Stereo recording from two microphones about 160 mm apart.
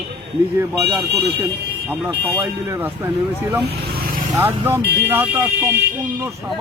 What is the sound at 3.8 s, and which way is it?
Vehicle, 70° right (ahead or behind).